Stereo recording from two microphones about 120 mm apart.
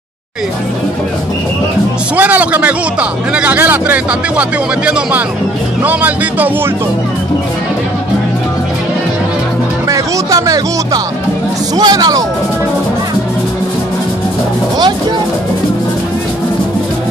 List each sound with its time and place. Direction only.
2.1 s a man's voice: 15° right (ahead or behind)
9.8 s speech: 30° right (ahead or behind)